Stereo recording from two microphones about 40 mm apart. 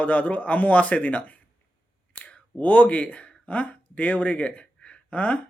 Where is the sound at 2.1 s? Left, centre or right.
Left.